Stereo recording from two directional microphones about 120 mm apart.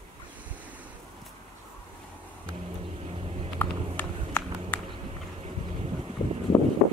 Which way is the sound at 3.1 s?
55° right (ahead or behind).